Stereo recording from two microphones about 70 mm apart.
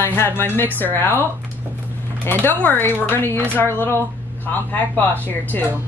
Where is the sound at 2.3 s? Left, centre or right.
Left.